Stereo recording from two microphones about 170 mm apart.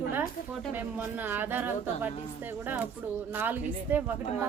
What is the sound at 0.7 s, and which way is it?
A woman's voice, 10° right (ahead or behind).